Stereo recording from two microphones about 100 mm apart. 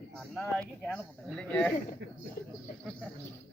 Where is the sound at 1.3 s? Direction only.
10° left (ahead or behind).